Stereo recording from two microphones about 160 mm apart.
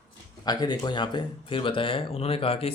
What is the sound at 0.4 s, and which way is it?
Speech, 25° left (ahead or behind).